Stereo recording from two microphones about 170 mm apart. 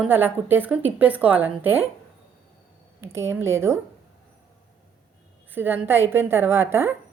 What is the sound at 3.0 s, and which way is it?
Speech, 15° right (ahead or behind).